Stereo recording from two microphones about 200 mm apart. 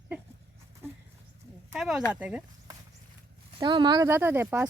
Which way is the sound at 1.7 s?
Centre (ahead or behind).